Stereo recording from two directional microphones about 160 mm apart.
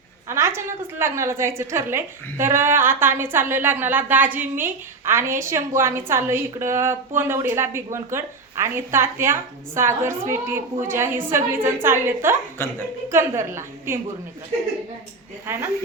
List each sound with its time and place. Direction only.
0.3 s a woman's voice: 15° right (ahead or behind)
12.6 s a woman's voice: 15° left (ahead or behind)
13.1 s a woman's voice: 15° right (ahead or behind)
15.5 s a woman's voice: 15° right (ahead or behind)